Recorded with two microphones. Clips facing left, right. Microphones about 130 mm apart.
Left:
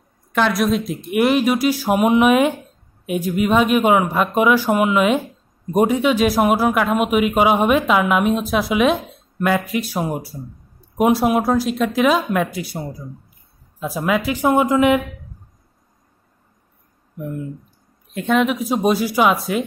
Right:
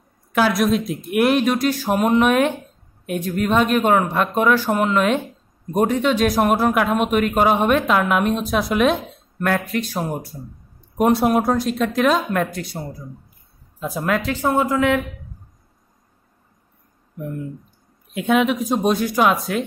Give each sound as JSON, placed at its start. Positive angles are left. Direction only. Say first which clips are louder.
{"t": 0.3, "sound": "speech", "louder": "even", "side_deg": 0}
{"t": 18.1, "sound": "speech", "louder": "even", "side_deg": -5}